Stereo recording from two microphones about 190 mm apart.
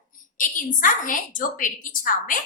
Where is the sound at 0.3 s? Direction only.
45° left (ahead or behind).